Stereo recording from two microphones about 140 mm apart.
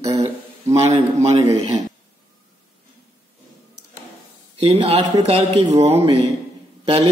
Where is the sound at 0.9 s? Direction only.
50° right (ahead or behind).